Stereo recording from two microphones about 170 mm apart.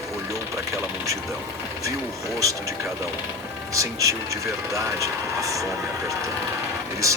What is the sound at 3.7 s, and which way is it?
Speech, 20° right (ahead or behind).